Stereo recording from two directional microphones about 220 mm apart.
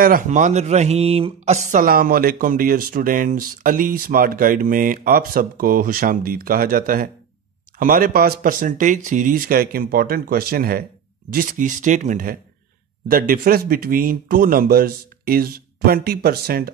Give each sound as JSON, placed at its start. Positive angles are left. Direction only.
{"t": 0.0, "sound": "speech", "side_deg": -35}